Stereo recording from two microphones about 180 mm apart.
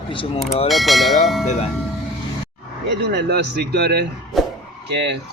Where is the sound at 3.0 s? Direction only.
70° right (ahead or behind).